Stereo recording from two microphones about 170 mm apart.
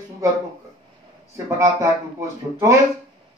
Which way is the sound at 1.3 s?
20° right (ahead or behind).